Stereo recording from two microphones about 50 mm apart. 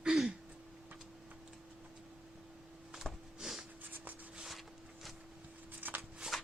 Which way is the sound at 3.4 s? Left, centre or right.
Centre.